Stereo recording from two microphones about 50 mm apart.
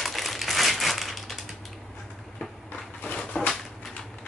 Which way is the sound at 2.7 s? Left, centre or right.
Left.